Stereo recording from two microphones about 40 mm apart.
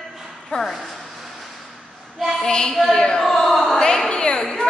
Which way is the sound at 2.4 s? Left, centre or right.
Centre.